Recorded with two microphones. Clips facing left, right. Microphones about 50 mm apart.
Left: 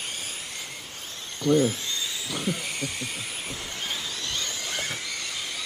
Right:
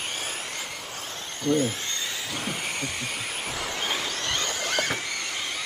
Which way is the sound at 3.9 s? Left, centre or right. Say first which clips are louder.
Right 3 dB; right.